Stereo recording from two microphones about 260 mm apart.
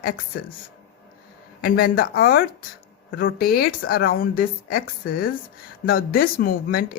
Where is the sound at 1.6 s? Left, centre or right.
Left.